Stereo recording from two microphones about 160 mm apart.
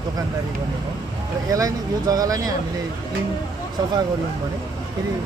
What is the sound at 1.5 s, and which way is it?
Speech, 20° right (ahead or behind).